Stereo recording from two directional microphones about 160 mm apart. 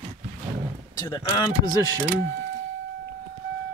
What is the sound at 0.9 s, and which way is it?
Speech, 25° left (ahead or behind).